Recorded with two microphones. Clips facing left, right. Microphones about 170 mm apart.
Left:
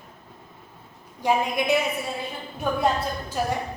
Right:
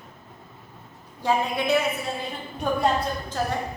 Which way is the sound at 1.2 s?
15° left (ahead or behind).